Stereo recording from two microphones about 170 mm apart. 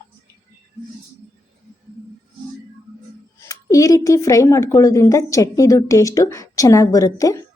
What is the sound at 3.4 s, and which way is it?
A woman's voice, 20° left (ahead or behind).